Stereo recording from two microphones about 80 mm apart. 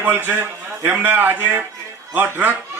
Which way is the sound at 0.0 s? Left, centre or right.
Right.